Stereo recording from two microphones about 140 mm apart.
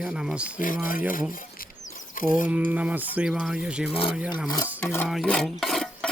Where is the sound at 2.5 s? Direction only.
10° right (ahead or behind).